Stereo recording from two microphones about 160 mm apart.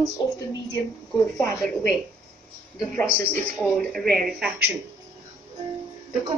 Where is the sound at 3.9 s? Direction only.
Centre (ahead or behind).